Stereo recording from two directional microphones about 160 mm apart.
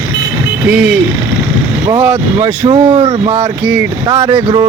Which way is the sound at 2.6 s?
30° right (ahead or behind).